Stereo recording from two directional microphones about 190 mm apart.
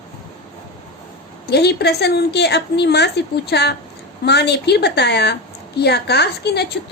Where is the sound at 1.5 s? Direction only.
60° left (ahead or behind).